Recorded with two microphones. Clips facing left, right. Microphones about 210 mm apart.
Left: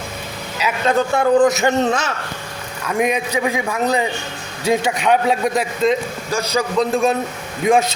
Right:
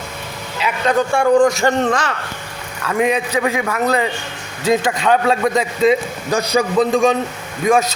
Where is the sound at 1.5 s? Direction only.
20° left (ahead or behind).